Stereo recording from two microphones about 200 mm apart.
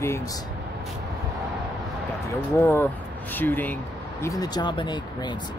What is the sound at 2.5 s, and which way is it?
Speech, 10° left (ahead or behind).